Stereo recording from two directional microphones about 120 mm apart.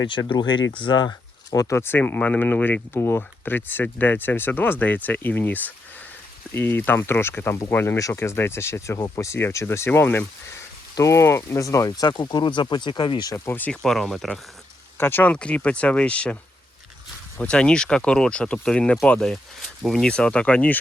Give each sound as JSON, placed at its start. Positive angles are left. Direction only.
{"t": 0.3, "sound": "speech", "side_deg": 40}
{"t": 13.3, "sound": "speech", "side_deg": 20}
{"t": 13.8, "sound": "speech", "side_deg": 5}
{"t": 14.9, "sound": "speech", "side_deg": 15}
{"t": 17.4, "sound": "speech", "side_deg": 5}